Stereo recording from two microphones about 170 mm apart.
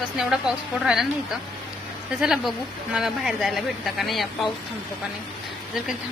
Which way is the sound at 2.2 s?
5° right (ahead or behind).